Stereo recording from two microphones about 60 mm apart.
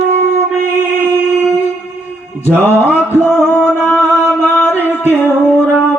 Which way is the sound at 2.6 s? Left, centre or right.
Left.